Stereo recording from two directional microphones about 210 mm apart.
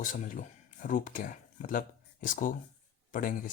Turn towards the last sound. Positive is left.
turn(degrees=40)  # may be behind; listen again after turning